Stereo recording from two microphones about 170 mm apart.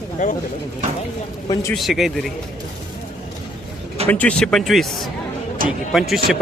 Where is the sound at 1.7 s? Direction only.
Centre (ahead or behind).